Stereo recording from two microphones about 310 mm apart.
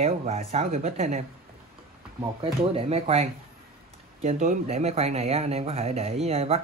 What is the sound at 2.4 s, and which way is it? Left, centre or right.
Speech, centre.